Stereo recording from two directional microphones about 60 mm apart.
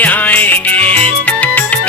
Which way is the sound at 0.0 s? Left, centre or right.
Left.